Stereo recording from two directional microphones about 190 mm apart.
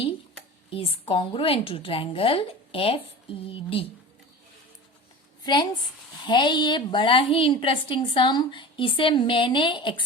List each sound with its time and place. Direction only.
0.7 s a woman's voice: 30° left (ahead or behind)
5.4 s a sound: 20° left (ahead or behind)
6.2 s a woman's voice: 25° left (ahead or behind)